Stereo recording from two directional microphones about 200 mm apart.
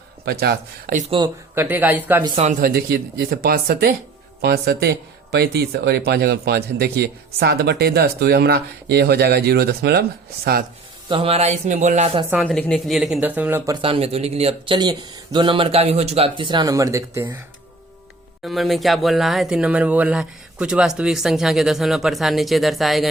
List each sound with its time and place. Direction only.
0.3 s a man's voice: 50° right (ahead or behind)
1.5 s speech: 10° right (ahead or behind)
2.4 s a man's voice: 40° right (ahead or behind)
11.1 s speech: 30° right (ahead or behind)
12.3 s speech: centre (ahead or behind)
13.8 s speech: 30° right (ahead or behind); by 17.4 s 10° right (ahead or behind)
18.4 s speech: centre (ahead or behind)